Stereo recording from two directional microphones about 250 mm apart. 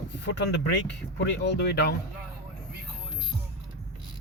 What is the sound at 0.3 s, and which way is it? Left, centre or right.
Speech, left.